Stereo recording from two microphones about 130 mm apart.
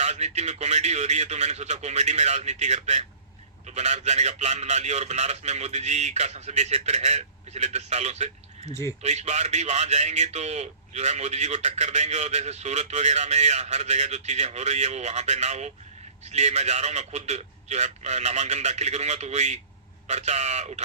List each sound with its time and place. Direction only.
0.0 s a man's voice: 60° right (ahead or behind)